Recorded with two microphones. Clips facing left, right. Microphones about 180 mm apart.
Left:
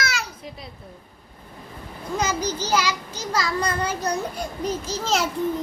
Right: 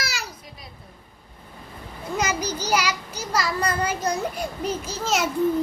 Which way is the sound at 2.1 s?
10° right (ahead or behind).